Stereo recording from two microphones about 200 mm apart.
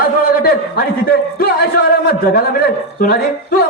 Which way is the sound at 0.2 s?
50° left (ahead or behind).